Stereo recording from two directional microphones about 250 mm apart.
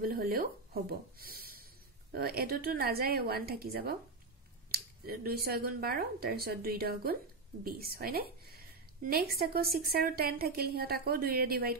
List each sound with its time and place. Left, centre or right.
0.0 s a woman's voice: right